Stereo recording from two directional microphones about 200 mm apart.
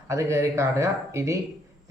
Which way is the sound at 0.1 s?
15° right (ahead or behind).